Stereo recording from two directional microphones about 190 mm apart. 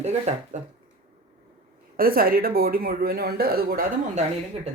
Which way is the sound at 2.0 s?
50° right (ahead or behind).